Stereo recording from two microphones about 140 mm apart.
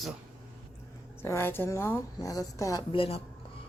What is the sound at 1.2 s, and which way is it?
A woman's voice, 15° left (ahead or behind).